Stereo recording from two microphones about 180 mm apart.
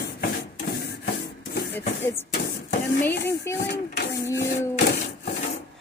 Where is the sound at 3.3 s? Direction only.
15° left (ahead or behind).